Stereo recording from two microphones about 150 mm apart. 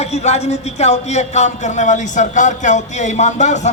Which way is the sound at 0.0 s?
45° left (ahead or behind).